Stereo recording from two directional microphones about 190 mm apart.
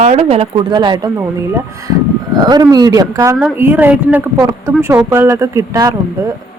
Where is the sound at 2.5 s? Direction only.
20° right (ahead or behind).